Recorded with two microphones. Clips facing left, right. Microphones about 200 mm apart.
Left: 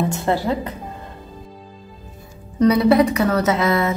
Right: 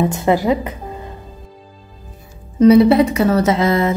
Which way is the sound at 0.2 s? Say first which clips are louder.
Right 5 dB; 15° right (ahead or behind).